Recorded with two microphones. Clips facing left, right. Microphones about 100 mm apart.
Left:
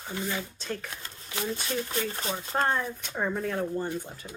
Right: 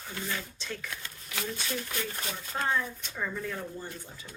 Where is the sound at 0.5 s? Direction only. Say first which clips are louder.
Left 4 dB; 45° left (ahead or behind).